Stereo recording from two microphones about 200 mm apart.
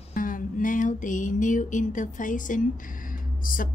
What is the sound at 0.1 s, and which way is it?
Speech, 45° left (ahead or behind).